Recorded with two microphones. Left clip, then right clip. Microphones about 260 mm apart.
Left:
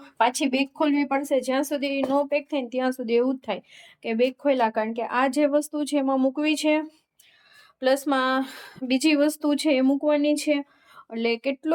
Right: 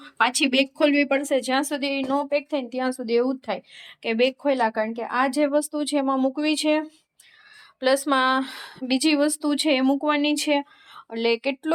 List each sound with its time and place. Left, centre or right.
0.0 s speech: centre